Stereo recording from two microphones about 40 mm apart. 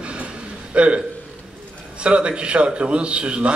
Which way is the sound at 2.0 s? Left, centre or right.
Right.